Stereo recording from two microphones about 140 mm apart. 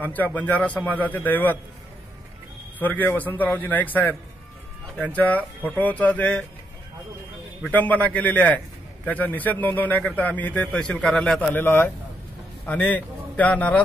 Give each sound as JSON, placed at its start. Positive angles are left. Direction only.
{"t": 0.0, "sound": "a man's voice", "side_deg": 10}
{"t": 2.8, "sound": "a man's voice", "side_deg": 10}
{"t": 7.7, "sound": "a man's voice", "side_deg": 10}